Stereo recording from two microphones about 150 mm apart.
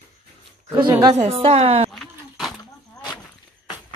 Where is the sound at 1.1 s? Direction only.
40° right (ahead or behind).